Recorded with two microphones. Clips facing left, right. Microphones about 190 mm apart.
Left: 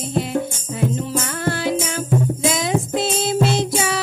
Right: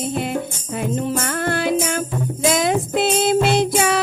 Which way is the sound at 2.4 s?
55° right (ahead or behind).